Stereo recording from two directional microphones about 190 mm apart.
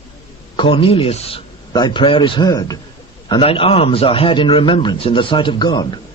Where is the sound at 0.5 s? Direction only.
25° left (ahead or behind).